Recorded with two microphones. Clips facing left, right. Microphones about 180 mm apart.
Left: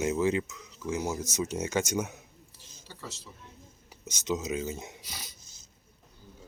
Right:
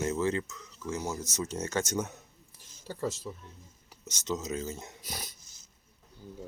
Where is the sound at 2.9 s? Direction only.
50° right (ahead or behind).